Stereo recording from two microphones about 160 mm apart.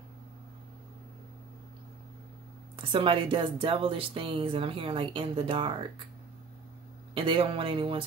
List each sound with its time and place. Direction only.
2.7 s speech: 35° right (ahead or behind)
7.2 s speech: 35° right (ahead or behind)